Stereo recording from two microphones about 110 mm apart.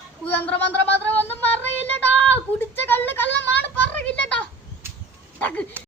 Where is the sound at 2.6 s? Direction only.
15° left (ahead or behind).